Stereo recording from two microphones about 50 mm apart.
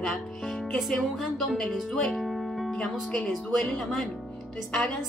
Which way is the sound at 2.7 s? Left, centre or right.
Centre.